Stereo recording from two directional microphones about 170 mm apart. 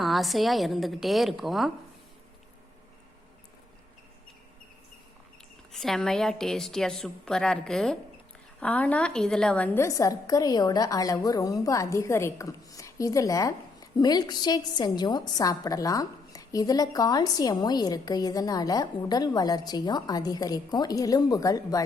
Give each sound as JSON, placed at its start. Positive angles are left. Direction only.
{"t": 0.0, "sound": "a woman's voice", "side_deg": 0}
{"t": 5.7, "sound": "a woman's voice", "side_deg": 5}